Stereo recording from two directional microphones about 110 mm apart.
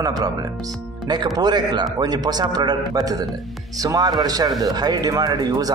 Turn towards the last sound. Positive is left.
turn(degrees=-35)  # may be behind; listen again after turning